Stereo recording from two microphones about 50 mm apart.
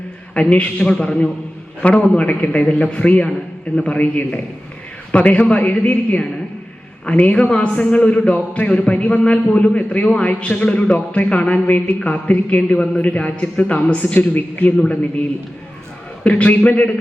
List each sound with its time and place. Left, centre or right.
0.3 s a man's voice: left
0.9 s a man's voice: centre
1.8 s a man's voice: left
16.2 s a man's voice: left